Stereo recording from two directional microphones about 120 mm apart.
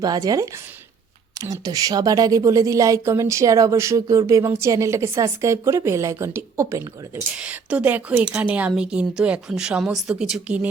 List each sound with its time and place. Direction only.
0.0 s a woman's voice: 30° right (ahead or behind)
7.3 s a woman's voice: 10° right (ahead or behind)